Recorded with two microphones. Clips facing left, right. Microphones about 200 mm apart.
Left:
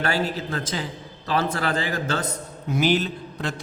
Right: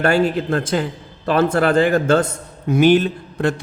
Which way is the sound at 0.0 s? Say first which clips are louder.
Right 8 dB; 55° right (ahead or behind).